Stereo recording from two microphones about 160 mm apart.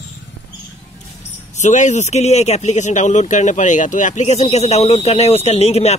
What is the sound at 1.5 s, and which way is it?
Speech, 50° left (ahead or behind).